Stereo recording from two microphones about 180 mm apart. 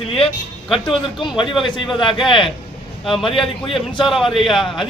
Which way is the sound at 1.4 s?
30° left (ahead or behind).